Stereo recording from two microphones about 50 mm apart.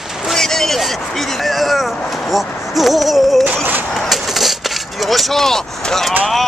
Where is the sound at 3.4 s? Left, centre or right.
Right.